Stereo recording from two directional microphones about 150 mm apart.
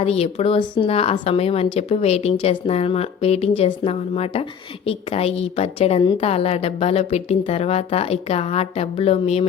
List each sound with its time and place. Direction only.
0.0 s a woman's voice: 45° left (ahead or behind)